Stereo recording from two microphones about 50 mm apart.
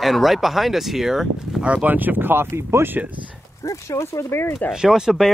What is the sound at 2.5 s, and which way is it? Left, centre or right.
Speech, right.